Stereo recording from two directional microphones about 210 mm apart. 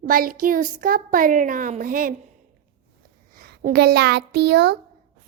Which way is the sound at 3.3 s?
45° right (ahead or behind).